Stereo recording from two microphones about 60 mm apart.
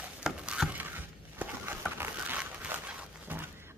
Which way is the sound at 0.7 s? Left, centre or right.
Right.